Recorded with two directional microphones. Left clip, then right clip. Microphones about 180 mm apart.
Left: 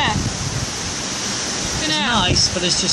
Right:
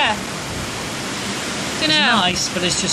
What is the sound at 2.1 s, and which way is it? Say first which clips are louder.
Speech: left 1 dB; 10° left (ahead or behind).